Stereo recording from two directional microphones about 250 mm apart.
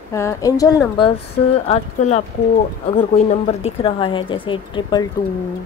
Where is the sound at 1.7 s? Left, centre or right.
Left.